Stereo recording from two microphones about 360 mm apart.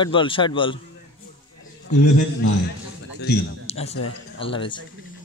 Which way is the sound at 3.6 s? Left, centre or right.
Centre.